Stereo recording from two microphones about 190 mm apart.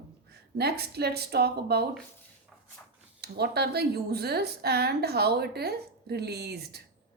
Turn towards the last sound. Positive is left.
turn(degrees=-60)  # may be behind; listen again after turning